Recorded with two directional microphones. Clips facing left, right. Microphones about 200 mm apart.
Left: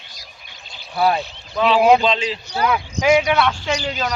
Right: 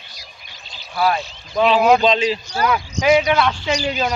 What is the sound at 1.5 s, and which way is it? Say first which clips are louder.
Speech: even; 20° right (ahead or behind).